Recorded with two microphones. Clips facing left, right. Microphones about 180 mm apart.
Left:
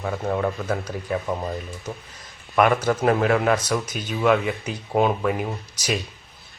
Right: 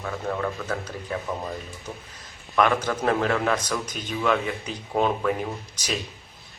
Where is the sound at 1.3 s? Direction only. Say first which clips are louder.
Left 3 dB; 15° left (ahead or behind).